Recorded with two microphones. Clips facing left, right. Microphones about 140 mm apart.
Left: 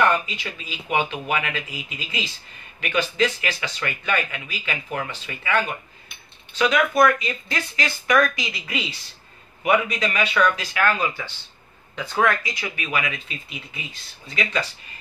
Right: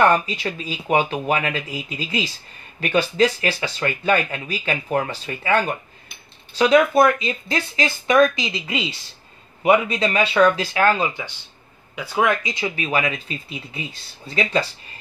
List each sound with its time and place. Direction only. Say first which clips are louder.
0.1 s speech: right 5 dB; 40° right (ahead or behind)
11.9 s speech: right 1 dB; 10° right (ahead or behind); by 14.7 s 30° right (ahead or behind)